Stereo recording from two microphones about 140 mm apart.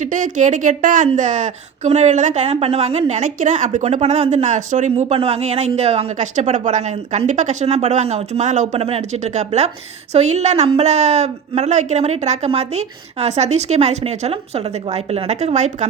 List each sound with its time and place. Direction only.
0.0 s a woman's voice: 65° right (ahead or behind)